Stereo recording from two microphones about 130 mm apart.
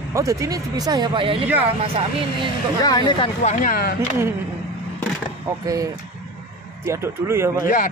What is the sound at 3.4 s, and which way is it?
Speech, 90° left.